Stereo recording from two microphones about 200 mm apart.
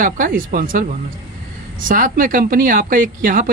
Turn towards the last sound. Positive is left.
turn(degrees=-45)  # may be behind; listen again after turning